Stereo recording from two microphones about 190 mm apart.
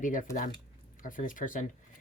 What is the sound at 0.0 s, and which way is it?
Speech, 45° left (ahead or behind).